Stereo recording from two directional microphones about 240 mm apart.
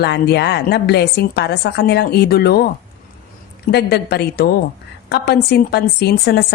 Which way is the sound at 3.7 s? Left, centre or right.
Left.